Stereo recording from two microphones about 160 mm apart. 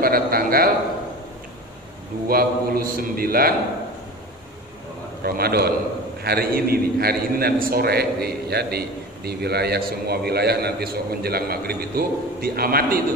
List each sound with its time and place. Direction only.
0.0 s a man's voice: 65° right (ahead or behind)
2.2 s a man's voice: 65° right (ahead or behind)
5.2 s a man's voice: 75° right (ahead or behind)